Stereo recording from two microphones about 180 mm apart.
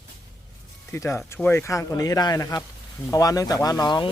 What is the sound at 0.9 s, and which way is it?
Speech, 15° left (ahead or behind).